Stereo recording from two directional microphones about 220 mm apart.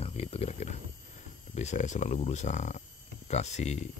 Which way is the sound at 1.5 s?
30° left (ahead or behind).